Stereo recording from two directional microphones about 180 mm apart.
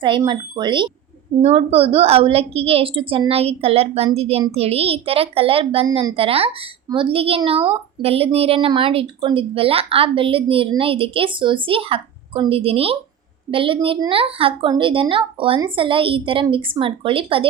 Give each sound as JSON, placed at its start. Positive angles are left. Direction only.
{"t": 0.0, "sound": "a woman's voice", "side_deg": -25}
{"t": 1.4, "sound": "a woman's voice", "side_deg": -35}